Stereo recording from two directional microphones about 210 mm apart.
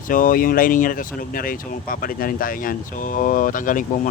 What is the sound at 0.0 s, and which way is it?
Speech, 40° left (ahead or behind).